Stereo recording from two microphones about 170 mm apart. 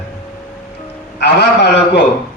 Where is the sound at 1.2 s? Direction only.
80° left.